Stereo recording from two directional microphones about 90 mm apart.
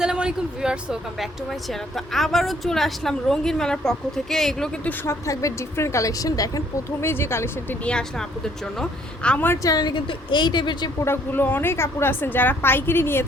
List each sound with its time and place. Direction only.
0.0 s speech: 10° right (ahead or behind)
2.0 s a woman's voice: centre (ahead or behind)
5.2 s a woman's voice: 35° left (ahead or behind)
7.0 s a woman's voice: 25° left (ahead or behind)
7.9 s speech: 10° left (ahead or behind)
9.6 s a woman's voice: 50° left (ahead or behind)
11.0 s a woman's voice: 25° left (ahead or behind)